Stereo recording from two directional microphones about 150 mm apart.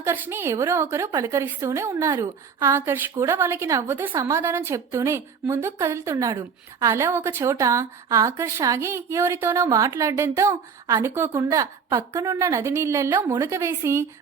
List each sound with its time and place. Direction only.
0.0 s a woman's voice: 15° right (ahead or behind)